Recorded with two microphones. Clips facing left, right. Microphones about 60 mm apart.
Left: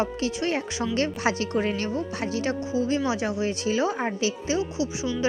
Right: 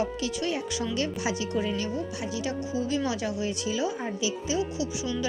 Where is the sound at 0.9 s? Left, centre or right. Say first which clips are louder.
Left 6 dB; left.